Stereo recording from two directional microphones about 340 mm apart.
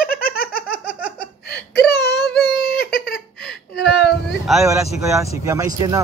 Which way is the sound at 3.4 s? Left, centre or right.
Centre.